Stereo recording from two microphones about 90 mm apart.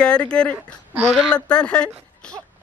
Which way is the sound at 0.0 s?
10° left (ahead or behind).